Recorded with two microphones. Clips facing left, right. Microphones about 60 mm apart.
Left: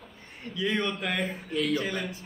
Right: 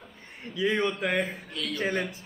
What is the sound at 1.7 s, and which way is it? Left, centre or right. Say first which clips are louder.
Speech: right 2 dB; right.